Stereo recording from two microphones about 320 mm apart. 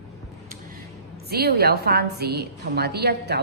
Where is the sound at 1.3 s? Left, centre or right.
Right.